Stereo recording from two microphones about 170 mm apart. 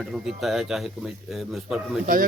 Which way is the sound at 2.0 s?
55° right (ahead or behind).